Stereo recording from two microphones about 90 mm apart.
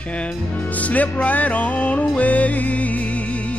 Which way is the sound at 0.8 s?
15° left (ahead or behind).